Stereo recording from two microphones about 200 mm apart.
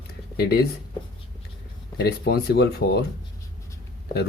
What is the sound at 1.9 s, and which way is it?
Speech, 50° left (ahead or behind).